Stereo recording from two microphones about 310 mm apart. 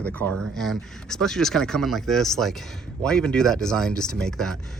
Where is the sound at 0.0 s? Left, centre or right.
Centre.